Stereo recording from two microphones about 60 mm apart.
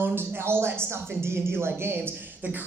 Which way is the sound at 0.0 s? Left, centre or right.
Right.